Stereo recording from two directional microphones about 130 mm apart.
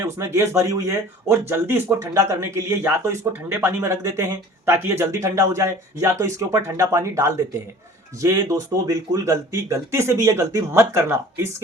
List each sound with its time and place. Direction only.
0.0 s speech: 20° right (ahead or behind)